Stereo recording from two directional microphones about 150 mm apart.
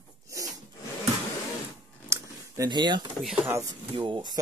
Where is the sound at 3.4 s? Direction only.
15° right (ahead or behind).